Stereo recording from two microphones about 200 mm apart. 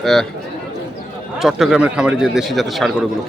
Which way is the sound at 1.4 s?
Centre (ahead or behind).